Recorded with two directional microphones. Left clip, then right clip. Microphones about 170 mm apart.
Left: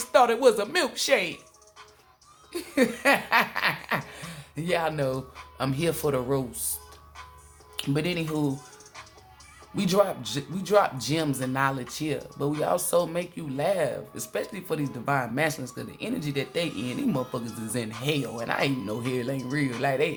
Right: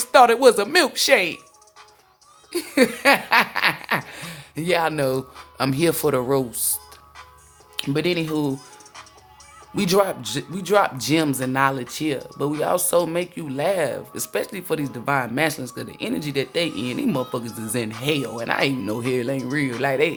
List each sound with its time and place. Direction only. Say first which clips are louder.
0.0 s laughter: right 6 dB; 45° right (ahead or behind)
2.5 s laughter: right 6 dB; 55° right (ahead or behind)
7.8 s speech: right 6 dB; 35° right (ahead or behind)
9.7 s speech: right 4 dB; 45° right (ahead or behind)